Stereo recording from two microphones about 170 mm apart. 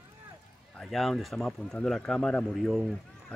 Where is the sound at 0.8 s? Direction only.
Centre (ahead or behind).